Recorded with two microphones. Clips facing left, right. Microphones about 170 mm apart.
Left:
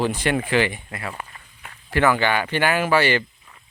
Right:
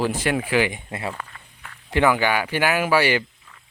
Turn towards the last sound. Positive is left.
turn(degrees=-10)  # may be behind; listen again after turning